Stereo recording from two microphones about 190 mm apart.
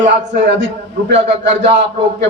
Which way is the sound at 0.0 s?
65° right (ahead or behind).